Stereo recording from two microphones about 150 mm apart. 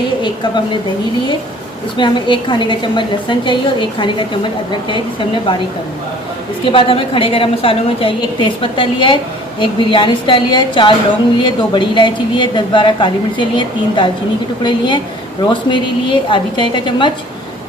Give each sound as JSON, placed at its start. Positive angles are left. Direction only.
{"t": 0.2, "sound": "a woman's voice", "side_deg": 30}
{"t": 2.0, "sound": "a woman's voice", "side_deg": 30}
{"t": 6.7, "sound": "a woman's voice", "side_deg": 35}